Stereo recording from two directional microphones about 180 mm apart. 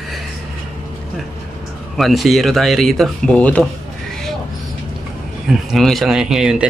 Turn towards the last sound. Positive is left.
turn(degrees=-5)  # may be behind; listen again after turning